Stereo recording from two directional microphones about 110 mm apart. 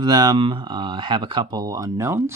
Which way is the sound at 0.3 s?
50° right (ahead or behind).